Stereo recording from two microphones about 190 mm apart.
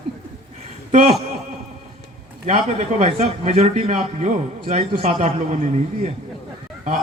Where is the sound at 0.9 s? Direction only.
35° right (ahead or behind).